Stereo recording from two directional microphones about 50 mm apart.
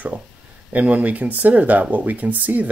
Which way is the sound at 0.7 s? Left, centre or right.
Right.